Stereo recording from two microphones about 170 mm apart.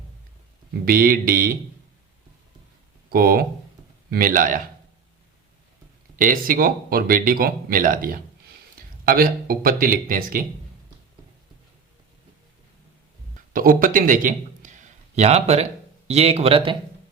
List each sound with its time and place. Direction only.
0.9 s speech: 55° right (ahead or behind)
3.1 s speech: 60° right (ahead or behind)
6.1 s speech: 55° right (ahead or behind)
13.5 s a man's voice: 55° right (ahead or behind); by 16.7 s 35° right (ahead or behind)